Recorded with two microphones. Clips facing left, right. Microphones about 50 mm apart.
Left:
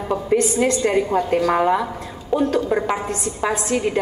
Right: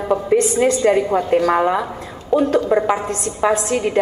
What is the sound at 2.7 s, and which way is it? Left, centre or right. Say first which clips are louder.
A woman's voice: right 4 dB; centre.